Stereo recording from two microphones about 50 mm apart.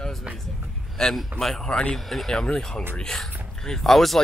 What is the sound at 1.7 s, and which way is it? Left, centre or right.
Speech, centre.